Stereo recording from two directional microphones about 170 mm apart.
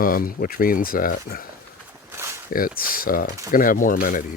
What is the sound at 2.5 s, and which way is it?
Speech, 55° left (ahead or behind).